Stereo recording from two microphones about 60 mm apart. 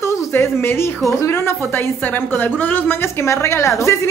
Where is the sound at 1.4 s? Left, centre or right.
Left.